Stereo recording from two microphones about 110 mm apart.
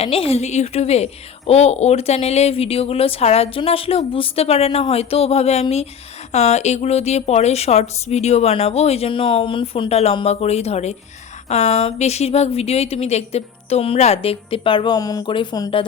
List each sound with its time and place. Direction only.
0.0 s a woman's voice: 60° left (ahead or behind)
6.3 s a woman's voice: 90° left; by 9.9 s 50° left (ahead or behind)
9.9 s a woman's voice: 70° left (ahead or behind); by 14.9 s 50° left (ahead or behind)
14.9 s speech: 35° left (ahead or behind)
15.3 s speech: 45° left (ahead or behind)